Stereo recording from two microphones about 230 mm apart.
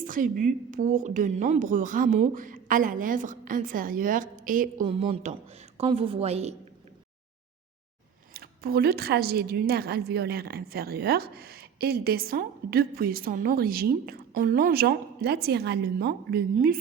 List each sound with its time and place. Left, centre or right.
0.0 s a woman's voice: right
8.3 s a woman's voice: right